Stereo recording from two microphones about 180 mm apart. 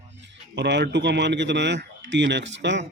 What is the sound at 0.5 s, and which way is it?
Speech, 70° right (ahead or behind).